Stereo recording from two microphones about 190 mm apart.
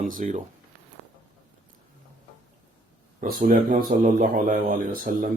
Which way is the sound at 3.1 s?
50° right (ahead or behind).